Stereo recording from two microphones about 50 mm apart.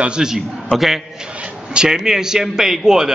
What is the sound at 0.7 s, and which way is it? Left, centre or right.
A man's voice, centre.